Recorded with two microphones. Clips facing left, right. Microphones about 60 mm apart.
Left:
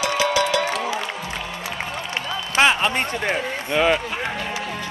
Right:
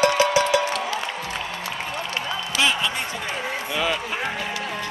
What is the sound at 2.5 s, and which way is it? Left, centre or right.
Speech, left.